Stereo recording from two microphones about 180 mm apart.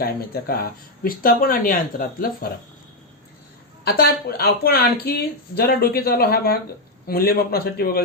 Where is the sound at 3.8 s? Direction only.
60° left (ahead or behind).